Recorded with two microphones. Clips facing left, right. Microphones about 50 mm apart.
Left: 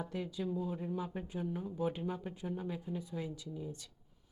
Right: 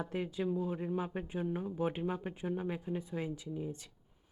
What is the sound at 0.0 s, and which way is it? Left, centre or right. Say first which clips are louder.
Speech: right 3 dB; right.